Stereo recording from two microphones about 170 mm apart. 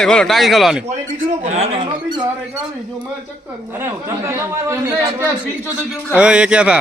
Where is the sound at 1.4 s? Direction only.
40° right (ahead or behind).